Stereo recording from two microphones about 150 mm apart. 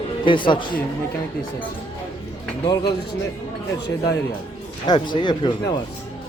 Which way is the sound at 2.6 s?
30° left (ahead or behind).